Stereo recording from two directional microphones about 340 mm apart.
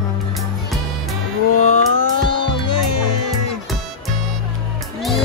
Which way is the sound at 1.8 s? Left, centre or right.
Centre.